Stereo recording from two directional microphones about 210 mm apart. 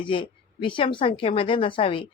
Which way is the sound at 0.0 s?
25° left (ahead or behind).